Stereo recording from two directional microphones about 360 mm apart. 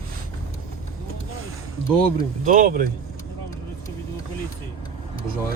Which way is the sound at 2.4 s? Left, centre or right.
Right.